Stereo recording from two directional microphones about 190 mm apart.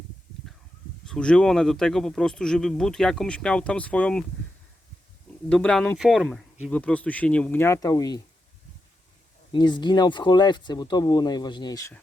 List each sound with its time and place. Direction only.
1.0 s speech: 5° left (ahead or behind)
5.5 s speech: 5° left (ahead or behind)
9.5 s speech: 25° left (ahead or behind)